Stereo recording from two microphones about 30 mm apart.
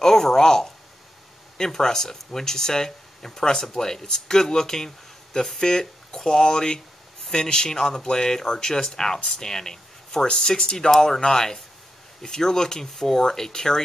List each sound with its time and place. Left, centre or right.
0.0 s speech: centre